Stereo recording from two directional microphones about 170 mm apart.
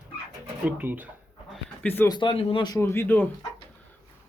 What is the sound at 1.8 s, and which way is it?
Speech, 10° left (ahead or behind).